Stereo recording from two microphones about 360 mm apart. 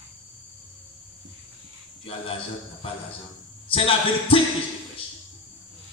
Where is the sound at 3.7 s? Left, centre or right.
Centre.